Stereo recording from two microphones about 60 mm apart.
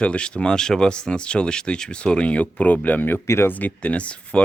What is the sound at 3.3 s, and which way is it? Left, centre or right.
Speech, left.